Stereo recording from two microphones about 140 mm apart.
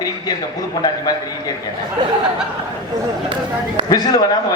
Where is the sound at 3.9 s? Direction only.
30° left (ahead or behind).